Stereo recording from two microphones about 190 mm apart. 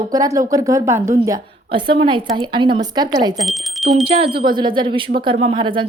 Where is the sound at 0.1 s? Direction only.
20° right (ahead or behind).